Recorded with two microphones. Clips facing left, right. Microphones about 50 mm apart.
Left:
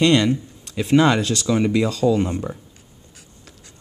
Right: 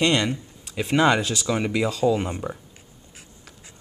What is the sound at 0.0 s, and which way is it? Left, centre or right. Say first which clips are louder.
Speech: left 5 dB; centre.